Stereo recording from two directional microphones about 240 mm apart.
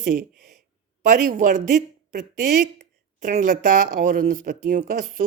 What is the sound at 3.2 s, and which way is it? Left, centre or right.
Speech, right.